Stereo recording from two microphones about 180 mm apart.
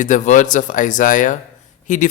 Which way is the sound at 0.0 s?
45° left (ahead or behind).